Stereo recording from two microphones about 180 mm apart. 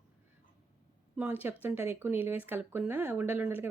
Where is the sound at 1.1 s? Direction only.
10° right (ahead or behind).